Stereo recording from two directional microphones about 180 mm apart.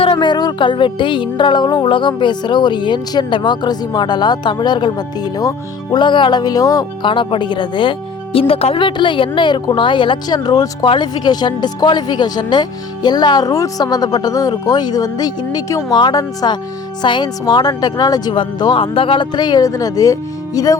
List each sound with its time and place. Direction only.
0.0 s music: 30° left (ahead or behind)